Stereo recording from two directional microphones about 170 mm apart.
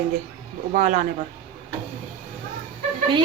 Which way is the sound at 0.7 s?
45° right (ahead or behind).